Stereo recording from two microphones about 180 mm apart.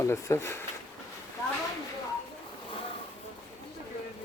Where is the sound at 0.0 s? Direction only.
15° left (ahead or behind).